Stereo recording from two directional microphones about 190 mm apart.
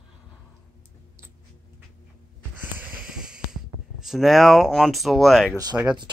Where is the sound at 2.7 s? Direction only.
5° right (ahead or behind).